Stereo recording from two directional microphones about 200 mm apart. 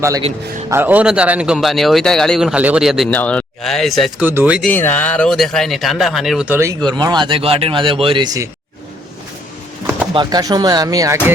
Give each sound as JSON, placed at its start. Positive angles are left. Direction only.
{"t": 0.7, "sound": "a man's voice", "side_deg": -10}
{"t": 4.6, "sound": "a man's voice", "side_deg": 10}
{"t": 10.2, "sound": "speech", "side_deg": -20}